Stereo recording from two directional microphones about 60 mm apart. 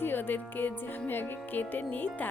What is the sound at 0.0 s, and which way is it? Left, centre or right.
A woman's voice, left.